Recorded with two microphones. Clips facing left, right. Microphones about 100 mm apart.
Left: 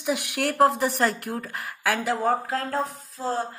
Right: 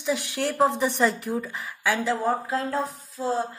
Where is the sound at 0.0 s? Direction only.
15° left (ahead or behind).